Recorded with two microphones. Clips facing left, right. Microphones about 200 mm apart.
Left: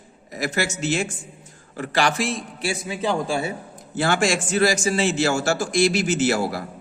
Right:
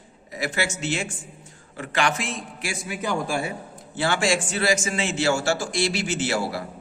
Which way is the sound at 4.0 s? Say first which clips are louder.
Left 2 dB; 45° left (ahead or behind).